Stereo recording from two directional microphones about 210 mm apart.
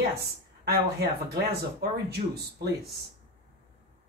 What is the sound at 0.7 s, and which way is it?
Speech, 50° right (ahead or behind).